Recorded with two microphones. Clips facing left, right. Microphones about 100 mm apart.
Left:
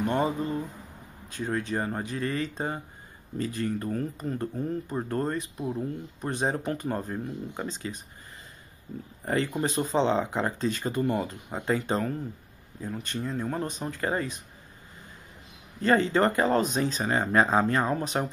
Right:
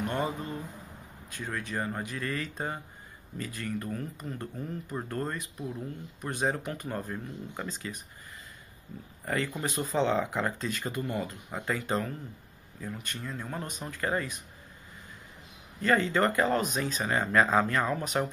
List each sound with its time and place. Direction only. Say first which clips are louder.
0.0 s a sound: left 5 dB; 30° left (ahead or behind)
1.3 s speech: left 6 dB; 30° left (ahead or behind)
9.2 s speech: left 4 dB; 30° left (ahead or behind)
15.8 s speech: left 3 dB; 30° left (ahead or behind)